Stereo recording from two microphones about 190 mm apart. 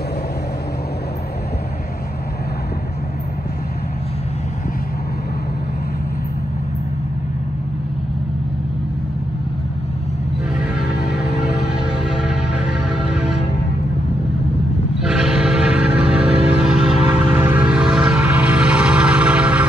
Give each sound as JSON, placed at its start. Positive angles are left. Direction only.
{"t": 10.8, "sound": "music", "side_deg": 55}
{"t": 12.1, "sound": "music", "side_deg": -5}
{"t": 15.0, "sound": "train", "side_deg": -5}
{"t": 16.4, "sound": "music", "side_deg": -5}